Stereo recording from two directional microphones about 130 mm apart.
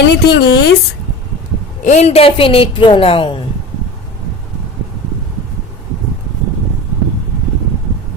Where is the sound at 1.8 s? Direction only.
65° left (ahead or behind); by 3.4 s 40° left (ahead or behind).